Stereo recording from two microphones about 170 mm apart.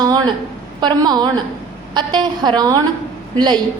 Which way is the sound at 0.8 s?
25° right (ahead or behind).